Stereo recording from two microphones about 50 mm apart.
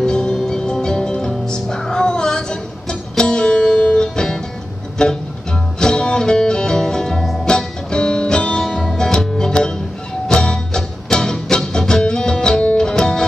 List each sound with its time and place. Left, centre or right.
0.0 s music: centre